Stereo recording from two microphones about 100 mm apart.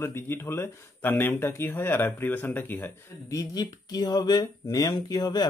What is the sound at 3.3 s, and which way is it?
Speech, 40° left (ahead or behind).